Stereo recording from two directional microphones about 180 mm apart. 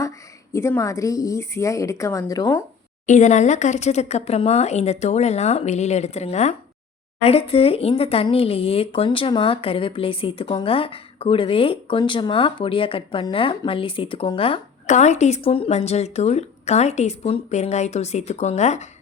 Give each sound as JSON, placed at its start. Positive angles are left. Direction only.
{"t": 0.5, "sound": "a woman's voice", "side_deg": 15}
{"t": 3.1, "sound": "speech", "side_deg": 40}